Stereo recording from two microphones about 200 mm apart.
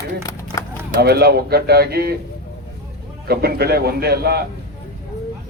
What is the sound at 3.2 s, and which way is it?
Speech, 55° right (ahead or behind).